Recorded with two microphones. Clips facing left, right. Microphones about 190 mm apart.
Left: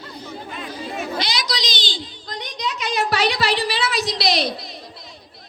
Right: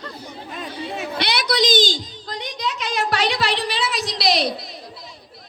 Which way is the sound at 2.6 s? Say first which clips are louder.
Left 1 dB; centre (ahead or behind).